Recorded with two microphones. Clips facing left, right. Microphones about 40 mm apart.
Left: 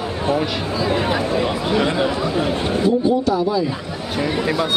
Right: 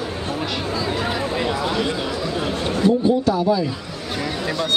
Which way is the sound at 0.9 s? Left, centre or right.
Left.